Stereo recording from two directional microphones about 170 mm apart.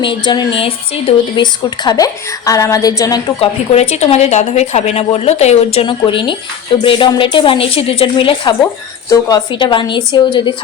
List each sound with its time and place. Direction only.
0.0 s a woman's voice: 30° left (ahead or behind)
3.4 s a woman's voice: 40° left (ahead or behind)